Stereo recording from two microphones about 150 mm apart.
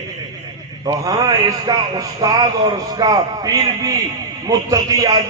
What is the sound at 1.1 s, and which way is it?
A man's voice, 25° right (ahead or behind).